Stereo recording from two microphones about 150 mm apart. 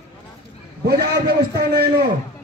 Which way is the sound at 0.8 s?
90° right.